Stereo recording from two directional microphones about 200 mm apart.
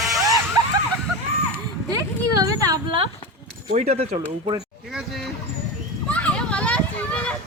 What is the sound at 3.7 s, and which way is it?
Speech, 35° right (ahead or behind).